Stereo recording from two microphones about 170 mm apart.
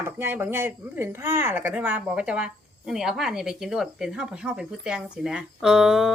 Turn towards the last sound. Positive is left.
turn(degrees=0)  # may be behind; listen again after turning